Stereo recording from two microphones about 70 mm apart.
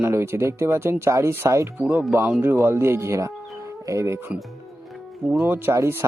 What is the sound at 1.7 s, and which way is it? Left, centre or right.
Speech, right.